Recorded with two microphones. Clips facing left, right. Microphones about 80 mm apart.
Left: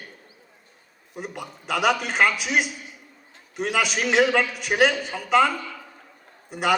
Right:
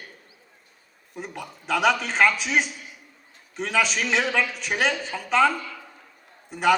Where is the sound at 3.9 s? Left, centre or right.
Left.